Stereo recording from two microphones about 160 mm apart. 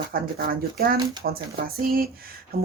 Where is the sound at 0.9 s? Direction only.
30° right (ahead or behind).